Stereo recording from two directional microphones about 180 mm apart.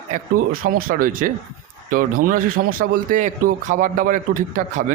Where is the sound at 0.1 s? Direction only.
50° right (ahead or behind).